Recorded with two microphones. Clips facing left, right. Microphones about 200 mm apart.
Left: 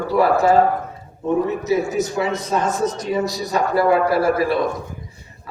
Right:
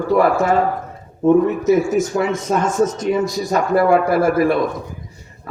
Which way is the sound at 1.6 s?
50° right (ahead or behind).